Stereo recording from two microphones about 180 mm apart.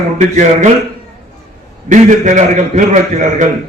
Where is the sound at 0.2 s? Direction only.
45° right (ahead or behind).